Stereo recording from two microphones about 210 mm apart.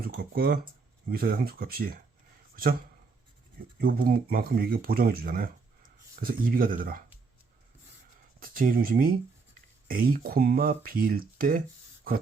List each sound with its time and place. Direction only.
0.0 s speech: 45° right (ahead or behind)
3.8 s speech: 45° right (ahead or behind)
8.4 s speech: 40° right (ahead or behind)